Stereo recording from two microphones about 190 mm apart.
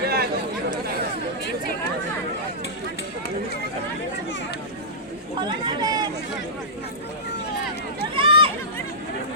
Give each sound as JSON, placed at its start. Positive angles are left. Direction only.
{"t": 0.0, "sound": "chatter", "side_deg": -55}
{"t": 5.4, "sound": "chatter", "side_deg": -25}
{"t": 8.1, "sound": "a sound", "side_deg": -30}